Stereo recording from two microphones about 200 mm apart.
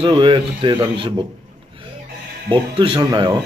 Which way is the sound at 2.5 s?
25° right (ahead or behind).